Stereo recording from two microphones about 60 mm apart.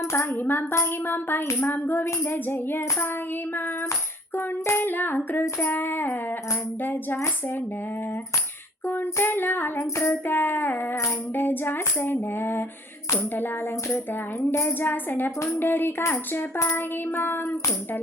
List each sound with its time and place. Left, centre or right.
0.0 s a woman's voice: left
0.3 s music: left
8.9 s music: left